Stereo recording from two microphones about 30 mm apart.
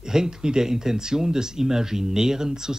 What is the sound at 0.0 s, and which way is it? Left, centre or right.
Speech, centre.